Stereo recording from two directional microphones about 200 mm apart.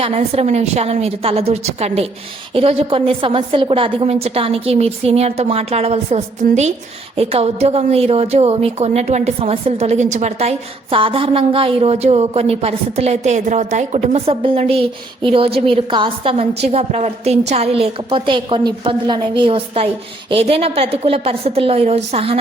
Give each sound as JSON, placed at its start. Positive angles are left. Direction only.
{"t": 0.0, "sound": "a woman's voice", "side_deg": -30}